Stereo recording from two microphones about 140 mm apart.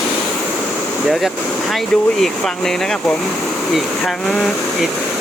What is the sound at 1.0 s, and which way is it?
Speech, centre (ahead or behind).